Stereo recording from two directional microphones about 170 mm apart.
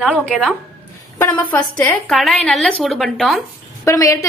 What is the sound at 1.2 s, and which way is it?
A woman's voice, 10° left (ahead or behind).